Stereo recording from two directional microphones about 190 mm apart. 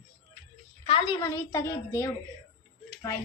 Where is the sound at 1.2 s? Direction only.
15° left (ahead or behind).